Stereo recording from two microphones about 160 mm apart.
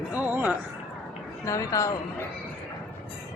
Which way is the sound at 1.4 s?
20° left (ahead or behind).